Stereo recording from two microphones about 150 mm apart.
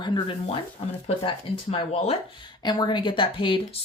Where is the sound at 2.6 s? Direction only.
30° left (ahead or behind).